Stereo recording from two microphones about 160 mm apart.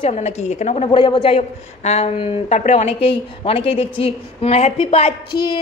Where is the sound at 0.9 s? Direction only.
30° left (ahead or behind).